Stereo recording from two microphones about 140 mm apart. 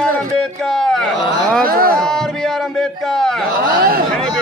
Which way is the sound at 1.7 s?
90° right.